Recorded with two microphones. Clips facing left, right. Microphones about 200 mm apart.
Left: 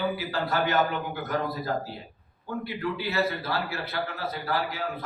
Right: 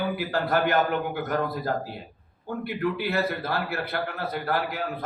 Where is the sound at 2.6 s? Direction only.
55° right (ahead or behind).